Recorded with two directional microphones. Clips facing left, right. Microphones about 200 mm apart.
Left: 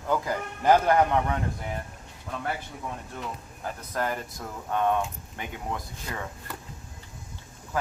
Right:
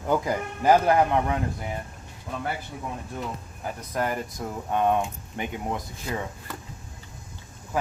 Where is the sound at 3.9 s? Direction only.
15° right (ahead or behind).